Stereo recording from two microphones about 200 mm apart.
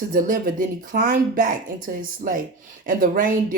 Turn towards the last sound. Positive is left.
turn(degrees=-40)  # may be behind; listen again after turning